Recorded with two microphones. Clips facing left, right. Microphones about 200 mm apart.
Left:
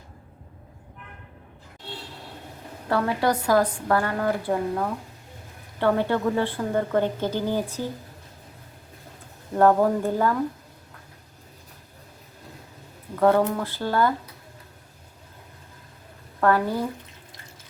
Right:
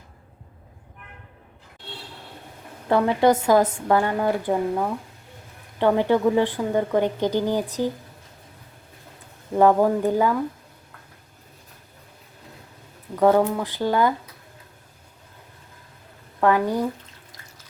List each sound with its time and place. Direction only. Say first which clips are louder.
2.9 s a woman's voice: right 5 dB; 20° right (ahead or behind)
5.8 s a woman's voice: right 3 dB; 15° right (ahead or behind)
9.6 s a woman's voice: right 1 dB; 10° right (ahead or behind)
13.1 s a woman's voice: right 2 dB; 15° right (ahead or behind)
16.4 s a woman's voice: right 2 dB; 15° right (ahead or behind)